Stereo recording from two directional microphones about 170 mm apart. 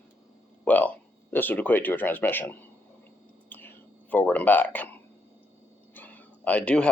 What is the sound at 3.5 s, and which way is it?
Whispering, 10° left (ahead or behind).